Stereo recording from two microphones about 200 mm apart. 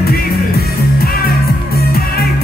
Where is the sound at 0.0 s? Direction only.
50° left (ahead or behind).